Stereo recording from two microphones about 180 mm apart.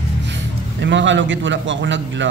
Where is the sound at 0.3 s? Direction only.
85° right.